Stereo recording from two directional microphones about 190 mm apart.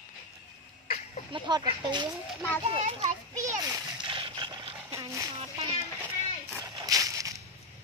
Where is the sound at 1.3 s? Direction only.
25° right (ahead or behind).